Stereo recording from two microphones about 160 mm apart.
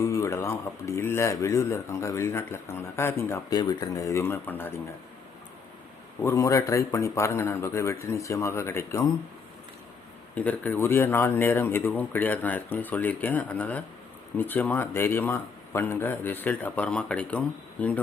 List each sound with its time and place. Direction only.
0.0 s speech: 20° left (ahead or behind)
6.2 s speech: 20° left (ahead or behind)
10.3 s speech: 10° left (ahead or behind)